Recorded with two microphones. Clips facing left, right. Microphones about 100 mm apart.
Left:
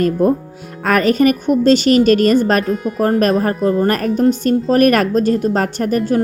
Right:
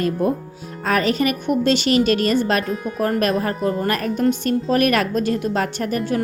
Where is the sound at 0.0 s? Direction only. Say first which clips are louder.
Left 6 dB; 45° left (ahead or behind).